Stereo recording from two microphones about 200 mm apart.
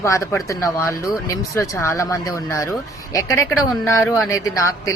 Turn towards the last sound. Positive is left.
turn(degrees=15)  # may be behind; listen again after turning